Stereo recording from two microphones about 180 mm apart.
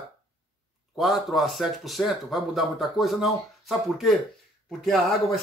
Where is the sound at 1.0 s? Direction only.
Centre (ahead or behind).